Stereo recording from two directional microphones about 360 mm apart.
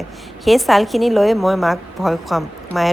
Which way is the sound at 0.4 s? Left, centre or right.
Centre.